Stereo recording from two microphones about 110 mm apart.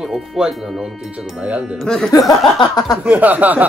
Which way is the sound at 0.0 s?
5° right (ahead or behind).